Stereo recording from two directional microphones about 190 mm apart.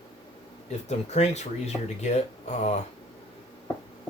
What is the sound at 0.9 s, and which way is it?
Speech, 35° left (ahead or behind).